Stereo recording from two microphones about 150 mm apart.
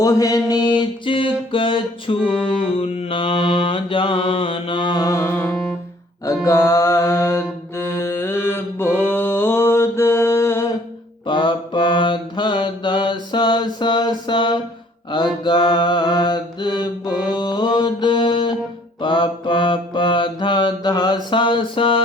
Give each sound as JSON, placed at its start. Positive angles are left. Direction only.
{"t": 0.0, "sound": "mantra", "side_deg": 25}
{"t": 11.3, "sound": "mantra", "side_deg": 30}